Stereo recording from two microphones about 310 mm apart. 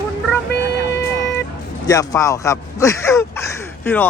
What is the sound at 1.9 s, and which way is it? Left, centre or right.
Speech, centre.